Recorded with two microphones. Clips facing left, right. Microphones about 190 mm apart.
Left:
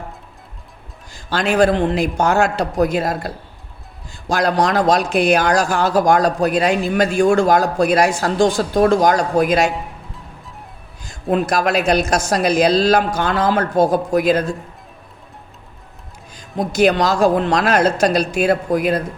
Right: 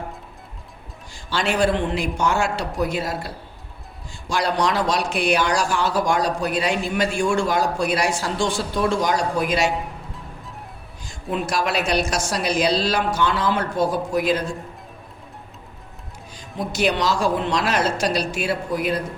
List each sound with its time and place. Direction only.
1.3 s speech: 45° left (ahead or behind)
11.3 s speech: 50° left (ahead or behind)
16.6 s speech: 45° left (ahead or behind)